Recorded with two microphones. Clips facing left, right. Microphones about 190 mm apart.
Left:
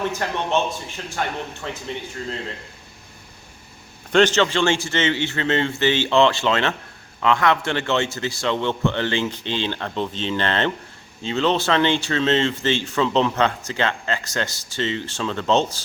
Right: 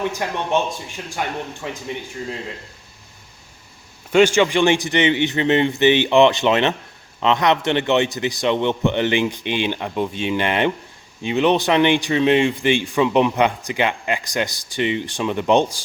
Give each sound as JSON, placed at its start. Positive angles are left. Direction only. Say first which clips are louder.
{"t": 0.1, "sound": "speech", "louder": "right 1 dB", "side_deg": -15}
{"t": 4.1, "sound": "speech", "louder": "right 3 dB", "side_deg": -10}